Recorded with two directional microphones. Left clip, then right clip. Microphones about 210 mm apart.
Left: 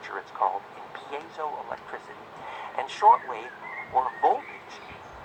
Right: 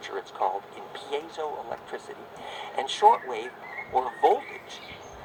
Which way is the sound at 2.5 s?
40° right (ahead or behind).